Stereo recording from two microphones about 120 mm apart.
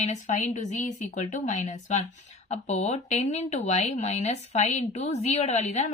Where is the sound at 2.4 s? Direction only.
70° left (ahead or behind).